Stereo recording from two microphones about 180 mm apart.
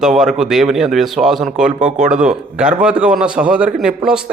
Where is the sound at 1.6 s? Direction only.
40° right (ahead or behind).